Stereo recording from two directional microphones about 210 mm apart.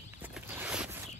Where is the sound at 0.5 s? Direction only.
5° right (ahead or behind).